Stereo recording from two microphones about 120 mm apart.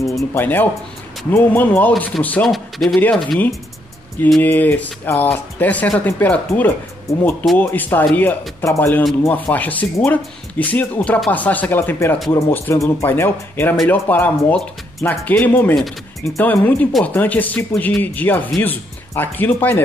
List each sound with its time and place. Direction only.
0.0 s speech: 20° left (ahead or behind)
2.4 s speech: centre (ahead or behind)
3.0 s speech: 10° left (ahead or behind)
15.7 s speech: centre (ahead or behind)
16.3 s speech: 15° left (ahead or behind)